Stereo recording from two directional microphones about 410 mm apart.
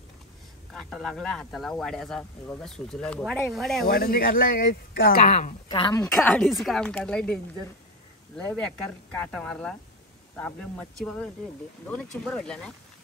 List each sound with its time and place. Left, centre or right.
0.7 s speech: centre
3.8 s speech: left; by 7.3 s centre
8.4 s speech: centre